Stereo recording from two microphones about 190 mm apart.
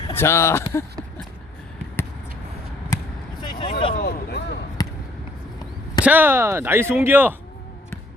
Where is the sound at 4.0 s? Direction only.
55° left (ahead or behind).